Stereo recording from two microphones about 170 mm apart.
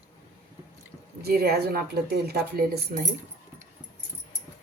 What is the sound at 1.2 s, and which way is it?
A woman's voice, 65° right (ahead or behind).